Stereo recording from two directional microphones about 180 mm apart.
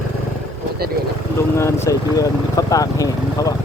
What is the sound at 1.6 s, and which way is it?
Speech, 15° left (ahead or behind).